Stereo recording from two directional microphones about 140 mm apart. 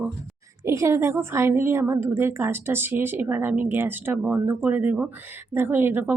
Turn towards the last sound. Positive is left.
turn(degrees=-15)  # may be behind; listen again after turning